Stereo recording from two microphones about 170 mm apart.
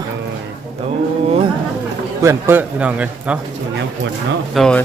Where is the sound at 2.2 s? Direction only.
10° right (ahead or behind).